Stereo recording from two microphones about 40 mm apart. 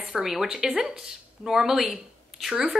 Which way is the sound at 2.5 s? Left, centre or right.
Centre.